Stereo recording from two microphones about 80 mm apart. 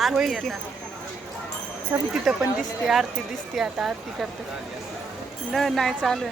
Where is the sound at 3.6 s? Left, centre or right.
Centre.